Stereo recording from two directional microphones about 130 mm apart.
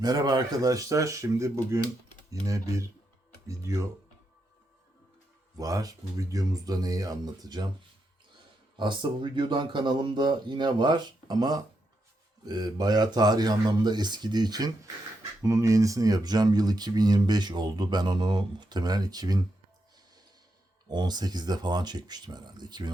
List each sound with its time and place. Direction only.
0.0 s speech: 30° right (ahead or behind)
5.5 s speech: 30° right (ahead or behind)
8.8 s speech: 40° right (ahead or behind)
20.8 s speech: 35° right (ahead or behind)